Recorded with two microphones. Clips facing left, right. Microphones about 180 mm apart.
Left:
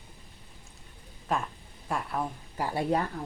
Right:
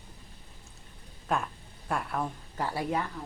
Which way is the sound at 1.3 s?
Centre (ahead or behind).